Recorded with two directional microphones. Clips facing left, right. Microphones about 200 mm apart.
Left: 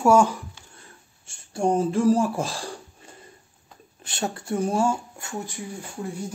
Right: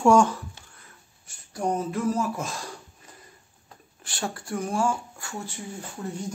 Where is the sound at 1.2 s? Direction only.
25° left (ahead or behind).